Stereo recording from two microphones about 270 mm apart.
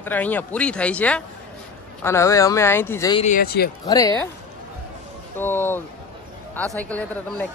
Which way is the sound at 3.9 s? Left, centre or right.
Centre.